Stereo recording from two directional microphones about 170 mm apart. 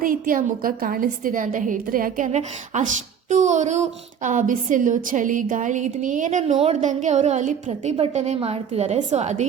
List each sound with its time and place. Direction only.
0.0 s a woman's voice: 55° right (ahead or behind)